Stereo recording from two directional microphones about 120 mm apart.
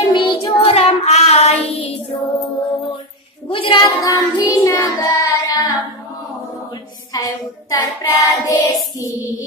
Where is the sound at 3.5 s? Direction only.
45° left (ahead or behind).